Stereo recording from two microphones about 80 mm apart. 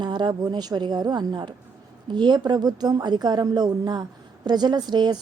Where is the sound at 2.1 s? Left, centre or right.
Right.